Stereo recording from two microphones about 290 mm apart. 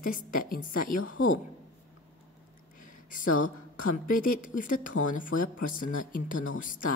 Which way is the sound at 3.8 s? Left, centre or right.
Left.